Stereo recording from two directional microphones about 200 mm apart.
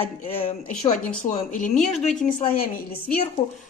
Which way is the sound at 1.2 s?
40° left (ahead or behind).